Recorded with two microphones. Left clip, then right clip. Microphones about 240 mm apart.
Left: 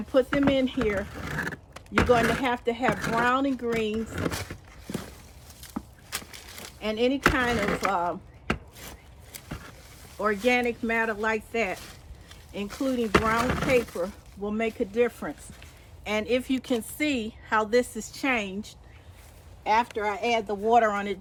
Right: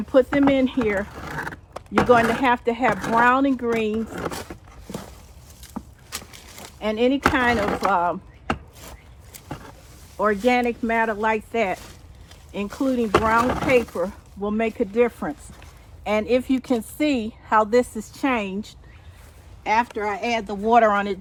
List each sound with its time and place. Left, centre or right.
0.1 s speech: centre
5.7 s a sound: centre
6.7 s speech: centre
10.2 s speech: centre
13.9 s speech: right
19.6 s speech: right; by 21.2 s centre